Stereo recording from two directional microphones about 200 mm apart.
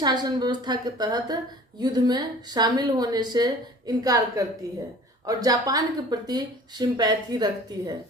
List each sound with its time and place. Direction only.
0.0 s speech: 20° right (ahead or behind)